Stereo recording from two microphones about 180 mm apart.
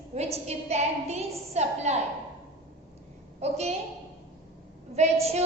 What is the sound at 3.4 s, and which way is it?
Speech, 35° right (ahead or behind).